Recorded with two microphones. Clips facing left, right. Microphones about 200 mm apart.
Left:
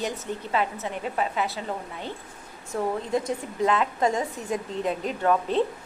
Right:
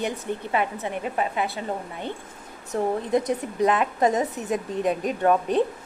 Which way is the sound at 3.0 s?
20° right (ahead or behind).